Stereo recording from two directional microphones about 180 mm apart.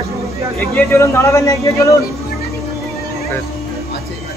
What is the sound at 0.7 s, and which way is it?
A man's voice, 15° left (ahead or behind).